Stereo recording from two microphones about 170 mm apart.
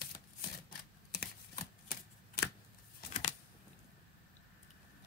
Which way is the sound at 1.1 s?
65° left (ahead or behind).